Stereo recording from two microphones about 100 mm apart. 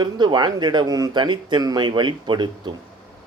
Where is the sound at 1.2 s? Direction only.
50° right (ahead or behind).